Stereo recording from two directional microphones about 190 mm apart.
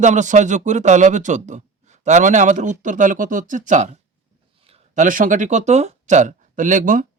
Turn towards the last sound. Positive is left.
turn(degrees=-45)  # may be behind; listen again after turning